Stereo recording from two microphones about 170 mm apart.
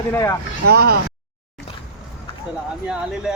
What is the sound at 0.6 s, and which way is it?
Speech, 70° right (ahead or behind).